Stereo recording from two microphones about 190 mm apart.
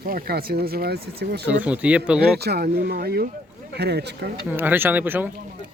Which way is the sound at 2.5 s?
55° right (ahead or behind).